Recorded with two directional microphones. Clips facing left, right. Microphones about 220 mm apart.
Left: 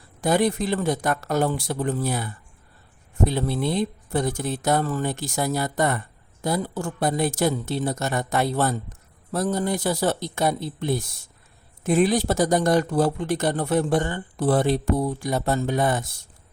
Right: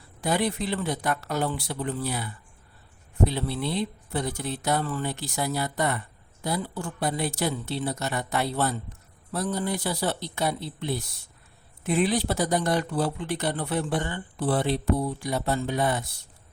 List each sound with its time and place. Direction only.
0.2 s speech: 45° left (ahead or behind)